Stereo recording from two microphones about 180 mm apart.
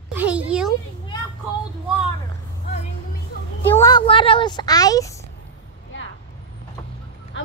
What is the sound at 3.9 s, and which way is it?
Speech, 30° left (ahead or behind).